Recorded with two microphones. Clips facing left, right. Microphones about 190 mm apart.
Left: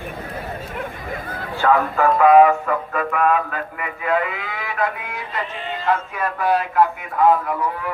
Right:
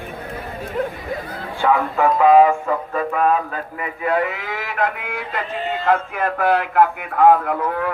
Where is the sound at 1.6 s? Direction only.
15° right (ahead or behind).